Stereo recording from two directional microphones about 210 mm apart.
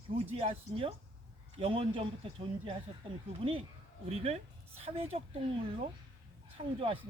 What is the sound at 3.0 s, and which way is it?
Speech, 25° right (ahead or behind).